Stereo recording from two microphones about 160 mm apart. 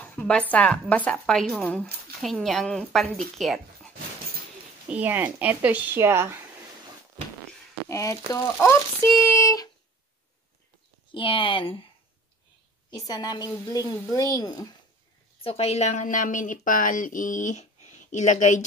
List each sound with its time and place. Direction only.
0.0 s a woman's voice: 10° left (ahead or behind)
4.8 s speech: 10° right (ahead or behind)
7.9 s a woman's voice: 20° left (ahead or behind)
11.1 s speech: 30° left (ahead or behind)
12.9 s a woman's voice: 25° left (ahead or behind)
15.4 s a woman's voice: 40° left (ahead or behind)